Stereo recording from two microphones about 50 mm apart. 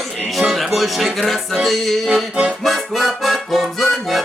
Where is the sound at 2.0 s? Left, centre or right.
Centre.